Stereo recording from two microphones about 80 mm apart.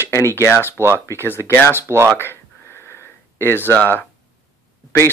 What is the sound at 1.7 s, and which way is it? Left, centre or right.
Speech, right.